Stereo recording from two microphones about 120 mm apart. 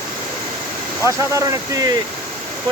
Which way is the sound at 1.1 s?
25° right (ahead or behind).